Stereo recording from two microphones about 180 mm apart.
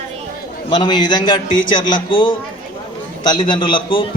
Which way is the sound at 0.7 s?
25° left (ahead or behind).